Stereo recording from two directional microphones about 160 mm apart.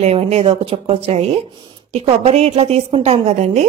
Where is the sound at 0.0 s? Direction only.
40° right (ahead or behind).